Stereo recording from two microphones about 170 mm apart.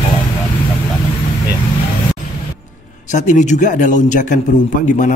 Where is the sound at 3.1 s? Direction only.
45° left (ahead or behind).